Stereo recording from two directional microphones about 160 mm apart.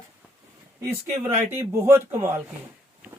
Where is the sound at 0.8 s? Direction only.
15° right (ahead or behind).